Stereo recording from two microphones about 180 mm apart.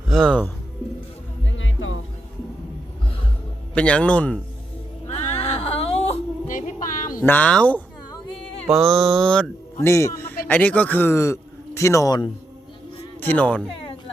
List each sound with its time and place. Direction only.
0.1 s speech: 5° left (ahead or behind)
1.5 s music: 90° left
3.8 s speech: 5° left (ahead or behind)
5.0 s music: 35° left (ahead or behind)
6.5 s music: 45° left (ahead or behind)
7.2 s speech: 10° left (ahead or behind)
8.7 s mantra: centre (ahead or behind)
9.8 s a man's voice: 15° left (ahead or behind)
13.1 s speech: 10° left (ahead or behind)